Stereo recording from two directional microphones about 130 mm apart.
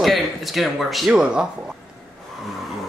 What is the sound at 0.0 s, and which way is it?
Speech, centre (ahead or behind).